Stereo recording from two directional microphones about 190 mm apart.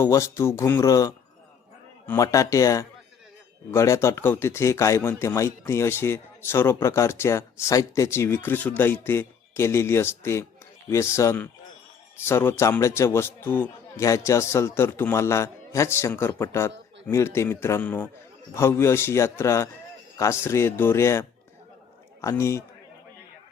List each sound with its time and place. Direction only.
0.0 s speech: 15° left (ahead or behind)